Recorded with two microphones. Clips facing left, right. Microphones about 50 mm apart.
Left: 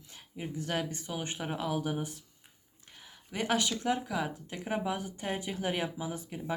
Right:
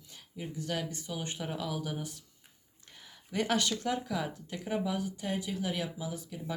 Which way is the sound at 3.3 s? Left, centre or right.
Centre.